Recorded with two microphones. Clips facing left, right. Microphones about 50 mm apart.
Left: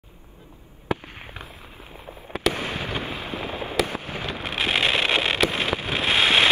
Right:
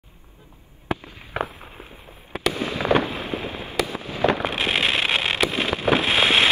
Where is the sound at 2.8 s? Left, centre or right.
Right.